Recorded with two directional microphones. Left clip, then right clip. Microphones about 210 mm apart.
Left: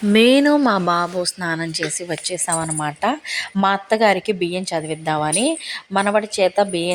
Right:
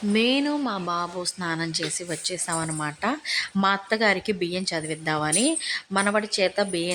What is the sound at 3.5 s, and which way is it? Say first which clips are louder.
Speech: left 7 dB; 10° left (ahead or behind).